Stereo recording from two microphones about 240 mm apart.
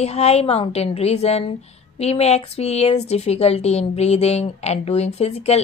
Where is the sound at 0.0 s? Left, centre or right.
Left.